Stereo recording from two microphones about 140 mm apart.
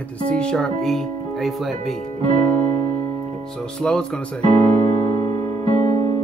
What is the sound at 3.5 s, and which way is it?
Speech, 5° left (ahead or behind).